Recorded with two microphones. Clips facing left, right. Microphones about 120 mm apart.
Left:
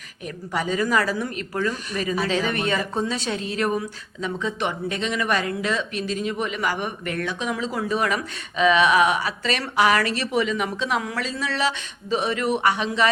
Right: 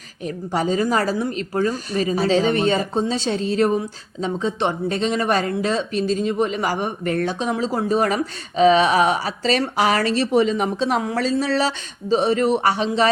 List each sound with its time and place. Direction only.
0.3 s speech: 30° right (ahead or behind)